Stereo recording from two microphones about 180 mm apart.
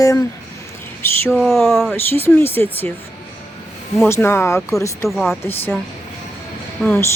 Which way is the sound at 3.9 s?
10° left (ahead or behind).